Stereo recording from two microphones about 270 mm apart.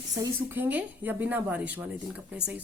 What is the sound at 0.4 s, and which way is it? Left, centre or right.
A woman's voice, centre.